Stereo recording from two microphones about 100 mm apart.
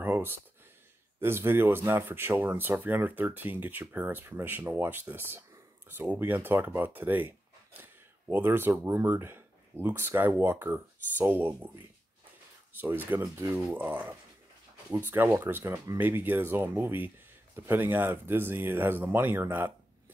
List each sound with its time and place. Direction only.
0.0 s a sound: 20° right (ahead or behind)
1.2 s speech: 25° right (ahead or behind)
12.8 s speech: 20° right (ahead or behind)